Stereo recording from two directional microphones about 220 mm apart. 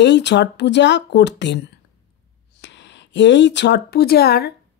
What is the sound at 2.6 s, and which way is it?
Speech, 55° left (ahead or behind).